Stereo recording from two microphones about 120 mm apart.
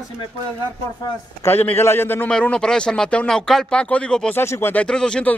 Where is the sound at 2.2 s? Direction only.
10° left (ahead or behind).